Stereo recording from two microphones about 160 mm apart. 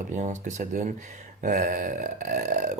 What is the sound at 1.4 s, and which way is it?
Speech, 55° right (ahead or behind).